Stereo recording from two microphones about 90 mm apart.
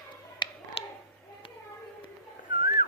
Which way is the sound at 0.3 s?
90° left.